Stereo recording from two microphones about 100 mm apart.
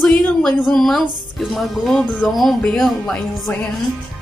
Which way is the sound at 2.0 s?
15° left (ahead or behind).